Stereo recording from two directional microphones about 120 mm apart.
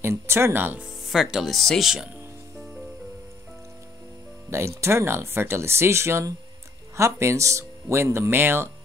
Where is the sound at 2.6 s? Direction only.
Centre (ahead or behind).